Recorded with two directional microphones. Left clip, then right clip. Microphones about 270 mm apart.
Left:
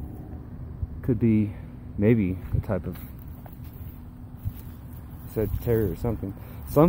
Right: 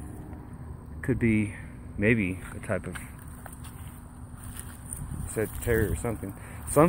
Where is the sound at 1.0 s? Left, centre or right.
Centre.